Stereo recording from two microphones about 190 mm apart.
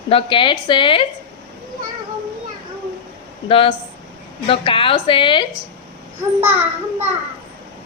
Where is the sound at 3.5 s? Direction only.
30° left (ahead or behind).